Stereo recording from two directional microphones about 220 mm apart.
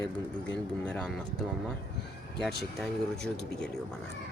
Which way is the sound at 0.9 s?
5° left (ahead or behind).